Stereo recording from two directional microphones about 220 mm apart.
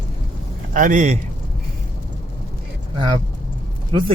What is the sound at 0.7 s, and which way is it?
Speech, 35° right (ahead or behind).